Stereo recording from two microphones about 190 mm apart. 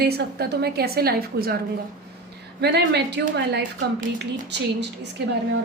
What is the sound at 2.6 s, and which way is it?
A woman's voice, 60° right (ahead or behind).